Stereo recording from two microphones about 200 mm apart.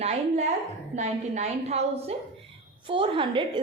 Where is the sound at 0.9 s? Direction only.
35° right (ahead or behind).